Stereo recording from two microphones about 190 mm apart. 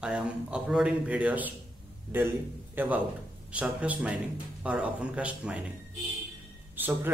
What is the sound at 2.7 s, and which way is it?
A man's voice, 10° right (ahead or behind).